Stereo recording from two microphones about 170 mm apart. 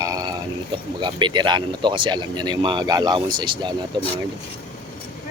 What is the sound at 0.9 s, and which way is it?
Speech, 25° right (ahead or behind).